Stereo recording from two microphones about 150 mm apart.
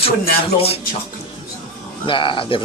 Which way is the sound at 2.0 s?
35° left (ahead or behind).